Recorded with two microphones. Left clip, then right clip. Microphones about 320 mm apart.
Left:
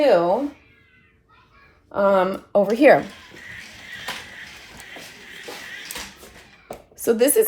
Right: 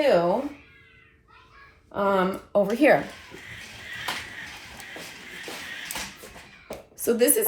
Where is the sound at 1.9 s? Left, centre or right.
Left.